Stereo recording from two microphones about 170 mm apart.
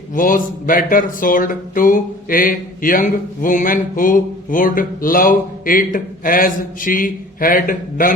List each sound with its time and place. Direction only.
0.1 s speech: 55° left (ahead or behind)